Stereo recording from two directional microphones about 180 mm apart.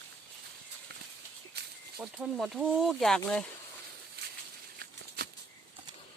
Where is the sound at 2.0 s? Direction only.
5° right (ahead or behind).